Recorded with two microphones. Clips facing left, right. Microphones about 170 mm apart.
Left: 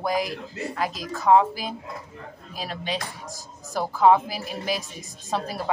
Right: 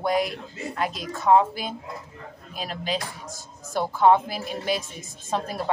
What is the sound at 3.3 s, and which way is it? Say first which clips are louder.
Speech: right 1 dB; centre (ahead or behind).